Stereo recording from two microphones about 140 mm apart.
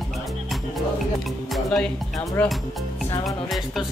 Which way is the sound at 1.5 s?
5° left (ahead or behind).